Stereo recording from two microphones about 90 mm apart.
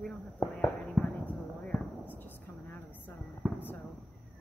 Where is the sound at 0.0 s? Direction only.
20° left (ahead or behind).